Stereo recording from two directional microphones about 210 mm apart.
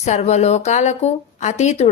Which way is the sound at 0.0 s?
30° left (ahead or behind).